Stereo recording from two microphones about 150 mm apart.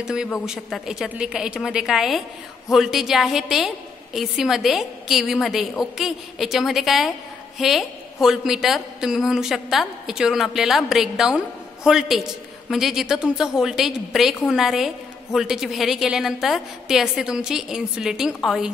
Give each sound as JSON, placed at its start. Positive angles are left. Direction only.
{"t": 0.0, "sound": "a woman's voice", "side_deg": -5}